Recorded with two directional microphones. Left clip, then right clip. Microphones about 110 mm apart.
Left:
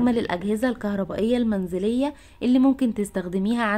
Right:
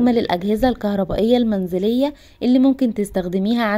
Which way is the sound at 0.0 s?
25° right (ahead or behind).